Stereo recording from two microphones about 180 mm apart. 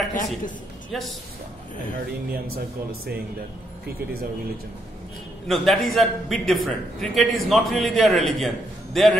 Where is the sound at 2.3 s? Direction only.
60° right (ahead or behind).